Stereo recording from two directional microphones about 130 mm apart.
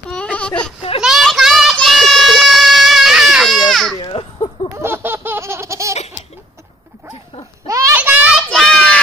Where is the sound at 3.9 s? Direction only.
35° left (ahead or behind).